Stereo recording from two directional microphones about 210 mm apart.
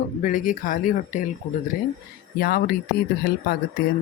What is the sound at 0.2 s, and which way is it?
Speech, 40° left (ahead or behind).